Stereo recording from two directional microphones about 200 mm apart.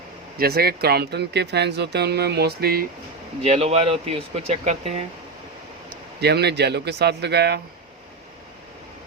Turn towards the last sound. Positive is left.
turn(degrees=-55)  # may be behind; listen again after turning